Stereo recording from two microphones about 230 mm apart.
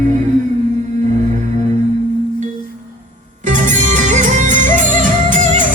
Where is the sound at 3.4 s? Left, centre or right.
Right.